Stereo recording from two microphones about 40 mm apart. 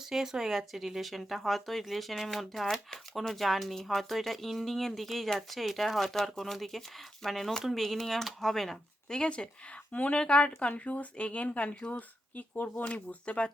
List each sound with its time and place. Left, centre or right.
0.1 s speech: centre
9.9 s speech: left
10.2 s speech: left
11.9 s speech: left
12.6 s speech: left